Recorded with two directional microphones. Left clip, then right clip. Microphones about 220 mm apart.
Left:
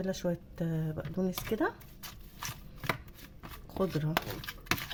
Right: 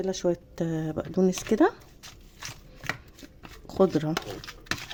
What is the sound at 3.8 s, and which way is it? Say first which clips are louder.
Speech: right 10 dB; 45° right (ahead or behind).